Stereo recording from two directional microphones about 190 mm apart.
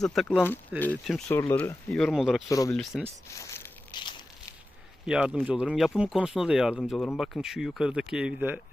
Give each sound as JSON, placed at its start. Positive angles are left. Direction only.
{"t": 0.0, "sound": "speech", "side_deg": 0}
{"t": 1.3, "sound": "speech", "side_deg": 15}
{"t": 1.9, "sound": "speech", "side_deg": 0}
{"t": 2.5, "sound": "speech", "side_deg": 15}
{"t": 2.7, "sound": "speech", "side_deg": 0}
{"t": 3.3, "sound": "a sound", "side_deg": 15}
{"t": 5.0, "sound": "speech", "side_deg": -5}